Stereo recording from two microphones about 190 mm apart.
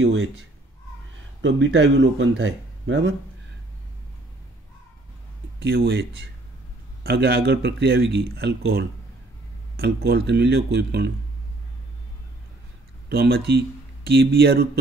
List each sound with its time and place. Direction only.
0.0 s speech: 85° right
5.6 s a man's voice: 55° right (ahead or behind)
13.1 s speech: 60° right (ahead or behind)